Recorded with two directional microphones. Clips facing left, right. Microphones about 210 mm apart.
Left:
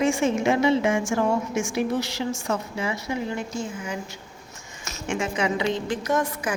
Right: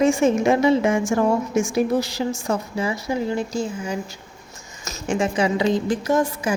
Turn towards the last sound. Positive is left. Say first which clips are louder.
# right 4 dB
turn(degrees=-30)  # may be behind; listen again after turning